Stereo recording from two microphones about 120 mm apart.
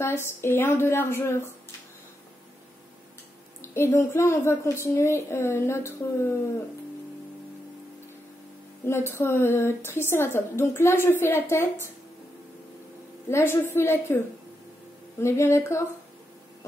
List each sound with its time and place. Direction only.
0.0 s a woman's voice: 20° left (ahead or behind)
3.6 s a woman's voice: 20° left (ahead or behind)
8.8 s a woman's voice: 20° left (ahead or behind)
13.3 s a woman's voice: 20° left (ahead or behind)